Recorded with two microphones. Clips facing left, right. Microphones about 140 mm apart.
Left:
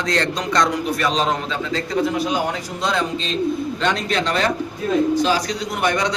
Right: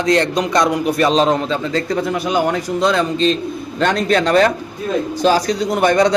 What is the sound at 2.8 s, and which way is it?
Speech, 60° right (ahead or behind).